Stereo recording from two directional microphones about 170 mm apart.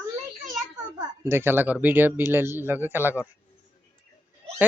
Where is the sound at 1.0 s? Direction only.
15° right (ahead or behind).